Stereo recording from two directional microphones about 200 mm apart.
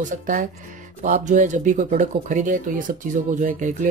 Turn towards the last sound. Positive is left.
turn(degrees=-40)  # may be behind; listen again after turning